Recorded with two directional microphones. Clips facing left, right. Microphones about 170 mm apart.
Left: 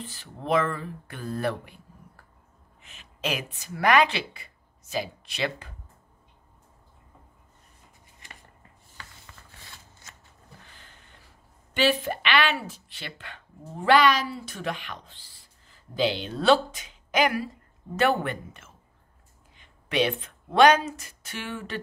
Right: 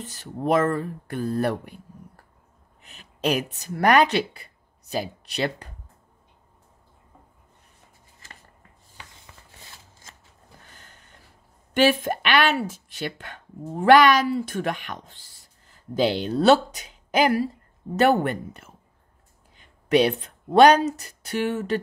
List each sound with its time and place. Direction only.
0.0 s speech: 45° right (ahead or behind)
2.8 s a woman's voice: 40° right (ahead or behind)
11.7 s speech: 50° right (ahead or behind)